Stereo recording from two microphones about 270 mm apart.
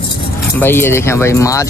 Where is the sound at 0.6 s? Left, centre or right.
Centre.